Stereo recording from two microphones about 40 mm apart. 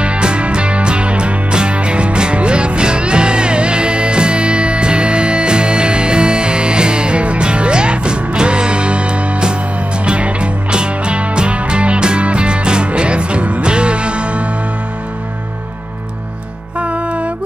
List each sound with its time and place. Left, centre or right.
0.0 s music: right
16.8 s music: right